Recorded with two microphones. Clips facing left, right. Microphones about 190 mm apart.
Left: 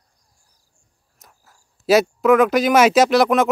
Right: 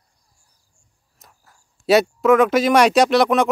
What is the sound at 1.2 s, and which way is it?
Speech, centre (ahead or behind).